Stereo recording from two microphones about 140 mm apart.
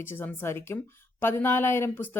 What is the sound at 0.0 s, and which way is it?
Speech, 15° left (ahead or behind).